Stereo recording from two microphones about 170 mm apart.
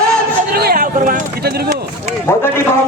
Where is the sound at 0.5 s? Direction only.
60° right (ahead or behind).